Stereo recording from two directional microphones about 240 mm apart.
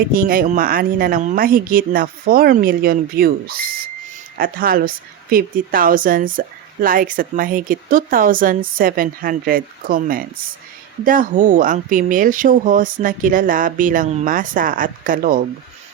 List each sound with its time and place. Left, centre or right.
0.1 s speech: right